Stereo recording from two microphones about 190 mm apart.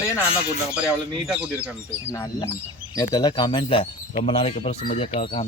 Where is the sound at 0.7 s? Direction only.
5° right (ahead or behind).